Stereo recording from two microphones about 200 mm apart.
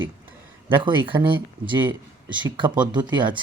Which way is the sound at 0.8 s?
25° right (ahead or behind).